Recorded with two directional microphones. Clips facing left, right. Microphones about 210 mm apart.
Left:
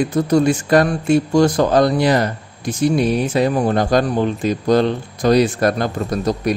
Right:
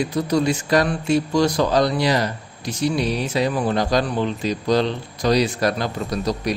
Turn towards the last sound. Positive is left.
turn(degrees=50)  # may be behind; listen again after turning